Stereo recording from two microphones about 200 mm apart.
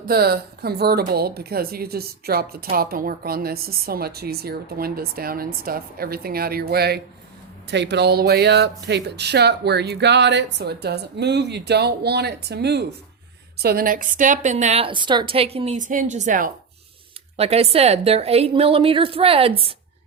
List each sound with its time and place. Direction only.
0.1 s a woman's voice: 50° right (ahead or behind); by 19.7 s 30° right (ahead or behind)